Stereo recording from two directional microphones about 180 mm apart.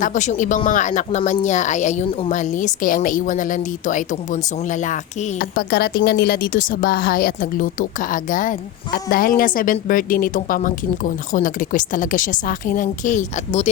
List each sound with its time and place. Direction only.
0.0 s a woman's voice: 45° left (ahead or behind)